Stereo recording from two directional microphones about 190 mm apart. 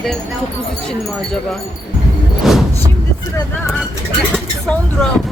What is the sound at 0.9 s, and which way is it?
Speech, 5° left (ahead or behind).